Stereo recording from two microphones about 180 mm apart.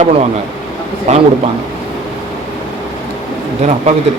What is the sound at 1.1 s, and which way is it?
Speech, 40° right (ahead or behind).